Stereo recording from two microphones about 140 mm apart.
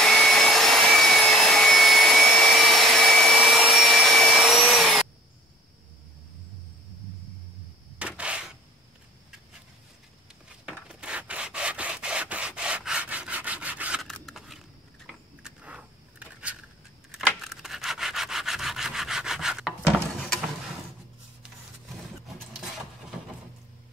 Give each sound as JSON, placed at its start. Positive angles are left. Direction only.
{"t": 0.0, "sound": "vacuum cleaner", "side_deg": 5}
{"t": 8.2, "sound": "a sound", "side_deg": -10}
{"t": 10.9, "sound": "rub", "side_deg": -5}
{"t": 14.0, "sound": "scissors", "side_deg": 0}
{"t": 15.0, "sound": "a sound", "side_deg": -5}
{"t": 17.4, "sound": "rub", "side_deg": 0}